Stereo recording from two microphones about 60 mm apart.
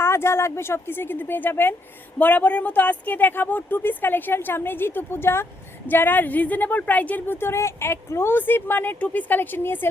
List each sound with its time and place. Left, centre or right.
0.0 s speech: left
5.9 s speech: left